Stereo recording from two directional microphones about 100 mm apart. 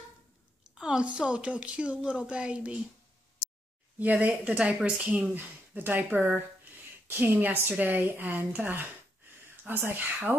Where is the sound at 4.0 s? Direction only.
15° right (ahead or behind).